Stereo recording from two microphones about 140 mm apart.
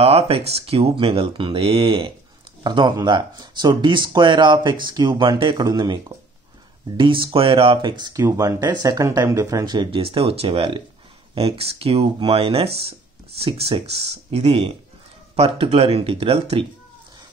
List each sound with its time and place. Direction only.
0.0 s speech: 45° right (ahead or behind)
8.2 s speech: 20° right (ahead or behind); by 16.6 s 45° right (ahead or behind)